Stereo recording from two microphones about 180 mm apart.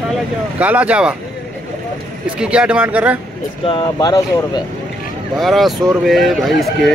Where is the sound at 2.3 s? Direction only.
5° right (ahead or behind).